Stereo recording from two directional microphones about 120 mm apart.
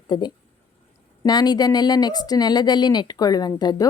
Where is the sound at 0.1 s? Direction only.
40° left (ahead or behind).